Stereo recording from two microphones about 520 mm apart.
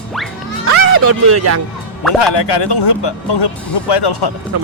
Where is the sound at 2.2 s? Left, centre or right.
Left.